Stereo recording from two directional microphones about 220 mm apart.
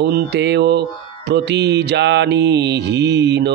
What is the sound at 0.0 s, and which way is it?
Mantra, 45° right (ahead or behind).